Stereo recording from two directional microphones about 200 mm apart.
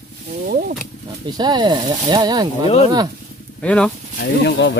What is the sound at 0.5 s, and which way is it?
Wild animals, 45° right (ahead or behind).